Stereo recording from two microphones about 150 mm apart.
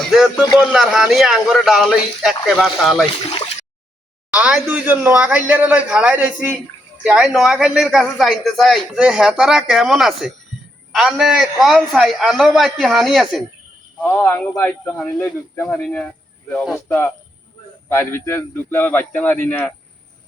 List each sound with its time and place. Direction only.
0.0 s a man's voice: 5° right (ahead or behind)
4.3 s a man's voice: 5° right (ahead or behind)
14.0 s speech: 15° left (ahead or behind)